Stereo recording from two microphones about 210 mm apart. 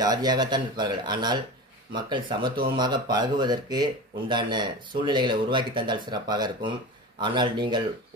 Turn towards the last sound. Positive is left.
turn(degrees=-20)  # may be behind; listen again after turning